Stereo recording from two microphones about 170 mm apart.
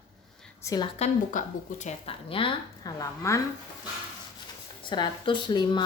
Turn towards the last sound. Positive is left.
turn(degrees=25)  # may be behind; listen again after turning